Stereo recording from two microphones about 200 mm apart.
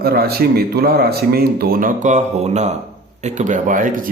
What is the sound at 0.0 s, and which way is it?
Speech, 50° right (ahead or behind).